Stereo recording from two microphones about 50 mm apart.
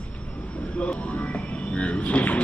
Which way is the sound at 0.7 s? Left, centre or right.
Left.